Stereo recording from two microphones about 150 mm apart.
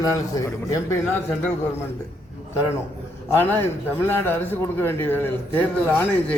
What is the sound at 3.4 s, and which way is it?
A man's voice, 15° left (ahead or behind).